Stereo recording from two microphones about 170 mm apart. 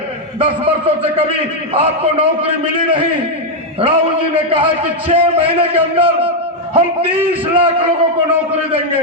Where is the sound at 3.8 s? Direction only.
35° right (ahead or behind).